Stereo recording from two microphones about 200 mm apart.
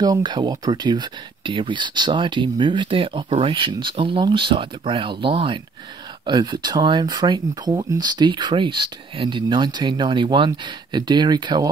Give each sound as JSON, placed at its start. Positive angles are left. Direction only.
{"t": 0.0, "sound": "speech", "side_deg": -20}